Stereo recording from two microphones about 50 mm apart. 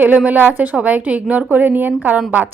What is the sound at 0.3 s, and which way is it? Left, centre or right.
A woman's voice, right.